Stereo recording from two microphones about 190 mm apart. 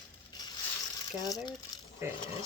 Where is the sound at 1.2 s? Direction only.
20° left (ahead or behind).